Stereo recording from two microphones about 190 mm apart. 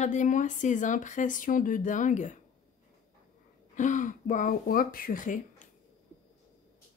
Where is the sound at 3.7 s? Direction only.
40° left (ahead or behind).